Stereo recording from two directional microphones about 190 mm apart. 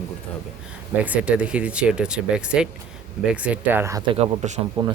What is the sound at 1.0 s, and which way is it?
Speech, 5° right (ahead or behind).